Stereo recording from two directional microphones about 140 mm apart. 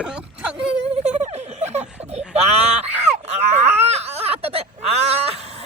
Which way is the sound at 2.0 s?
50° right (ahead or behind).